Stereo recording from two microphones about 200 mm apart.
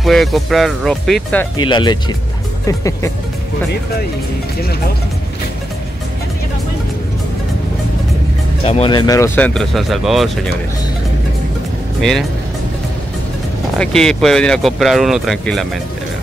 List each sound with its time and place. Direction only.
0.0 s speech: centre (ahead or behind)
1.6 s speech: 20° left (ahead or behind)
8.6 s speech: 25° left (ahead or behind); by 10.5 s centre (ahead or behind)
12.0 s speech: centre (ahead or behind)
13.7 s speech: 5° left (ahead or behind)